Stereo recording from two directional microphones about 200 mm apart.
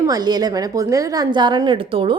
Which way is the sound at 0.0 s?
20° right (ahead or behind).